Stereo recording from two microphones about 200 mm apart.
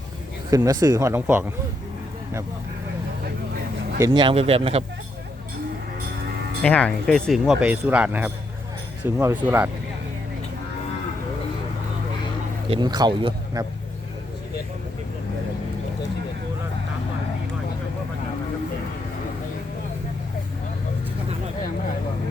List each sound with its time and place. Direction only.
0.5 s speech: 15° right (ahead or behind)
4.0 s speech: 20° right (ahead or behind)
6.6 s speech: 5° left (ahead or behind)
12.7 s speech: 20° right (ahead or behind)